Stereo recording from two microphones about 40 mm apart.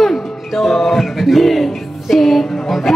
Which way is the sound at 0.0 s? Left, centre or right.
Centre.